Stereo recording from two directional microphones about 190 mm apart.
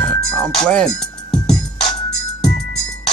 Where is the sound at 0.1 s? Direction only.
5° left (ahead or behind).